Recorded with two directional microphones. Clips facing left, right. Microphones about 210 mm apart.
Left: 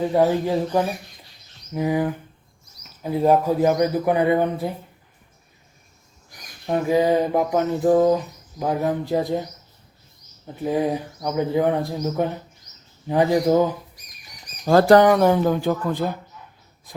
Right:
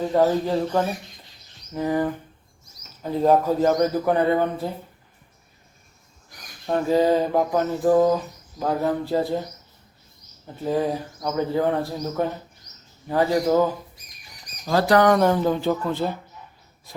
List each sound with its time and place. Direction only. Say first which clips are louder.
0.0 s speech: left 1 dB; 10° left (ahead or behind)
6.7 s speech: even; 15° left (ahead or behind)
10.4 s speech: left 1 dB; 15° left (ahead or behind)
14.7 s speech: left 6 dB; 50° left (ahead or behind)
15.0 s speech: left 2 dB; 5° left (ahead or behind)